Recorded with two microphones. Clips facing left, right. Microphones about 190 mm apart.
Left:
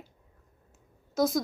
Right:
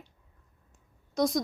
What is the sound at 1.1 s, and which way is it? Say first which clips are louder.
Speech: left 1 dB; centre (ahead or behind).